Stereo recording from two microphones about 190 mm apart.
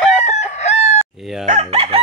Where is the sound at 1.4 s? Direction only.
35° right (ahead or behind).